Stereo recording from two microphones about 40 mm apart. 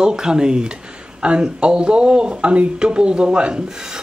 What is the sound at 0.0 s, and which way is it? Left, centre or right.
Speech, centre.